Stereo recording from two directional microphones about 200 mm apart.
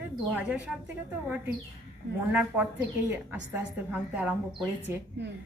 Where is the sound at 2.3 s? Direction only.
5° right (ahead or behind).